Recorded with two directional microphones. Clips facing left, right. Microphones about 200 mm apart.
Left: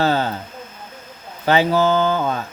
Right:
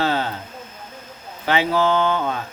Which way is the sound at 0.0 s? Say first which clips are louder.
Left 3 dB; 40° left (ahead or behind).